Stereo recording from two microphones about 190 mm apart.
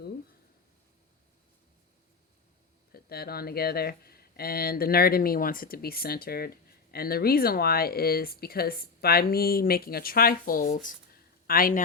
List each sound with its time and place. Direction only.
2.9 s speech: 55° left (ahead or behind)